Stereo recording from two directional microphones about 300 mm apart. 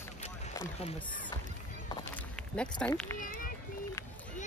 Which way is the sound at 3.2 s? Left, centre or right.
Left.